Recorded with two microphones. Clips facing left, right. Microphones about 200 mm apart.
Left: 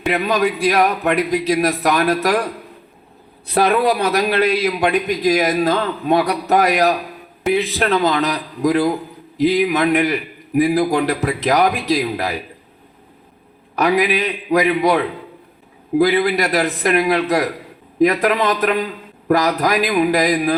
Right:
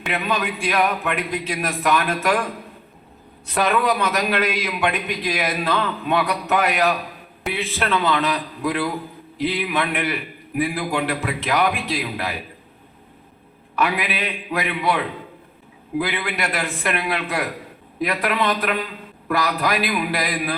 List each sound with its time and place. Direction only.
0.1 s a man's voice: 40° left (ahead or behind)
13.7 s a man's voice: 40° left (ahead or behind)